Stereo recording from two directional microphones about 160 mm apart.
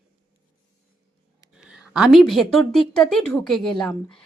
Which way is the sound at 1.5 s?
5° right (ahead or behind).